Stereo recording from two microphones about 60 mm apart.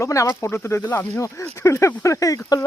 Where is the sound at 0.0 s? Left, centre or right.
Left.